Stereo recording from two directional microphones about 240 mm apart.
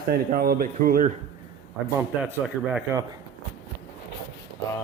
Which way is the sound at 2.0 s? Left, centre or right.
Centre.